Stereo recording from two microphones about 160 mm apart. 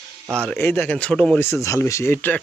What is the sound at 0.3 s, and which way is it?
Speech, 5° left (ahead or behind).